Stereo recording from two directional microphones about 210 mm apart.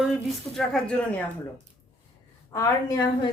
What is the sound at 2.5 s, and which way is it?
Speech, 15° left (ahead or behind).